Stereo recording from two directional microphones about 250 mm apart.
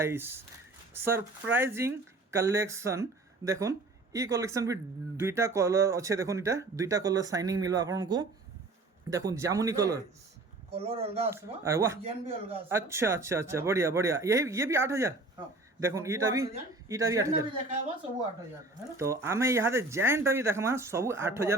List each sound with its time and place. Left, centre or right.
0.0 s speech: centre
10.7 s a man's voice: right
11.3 s speech: centre
12.0 s a man's voice: right
12.6 s speech: centre
18.9 s speech: centre